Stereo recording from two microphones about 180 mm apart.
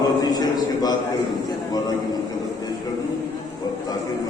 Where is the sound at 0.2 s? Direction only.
20° left (ahead or behind).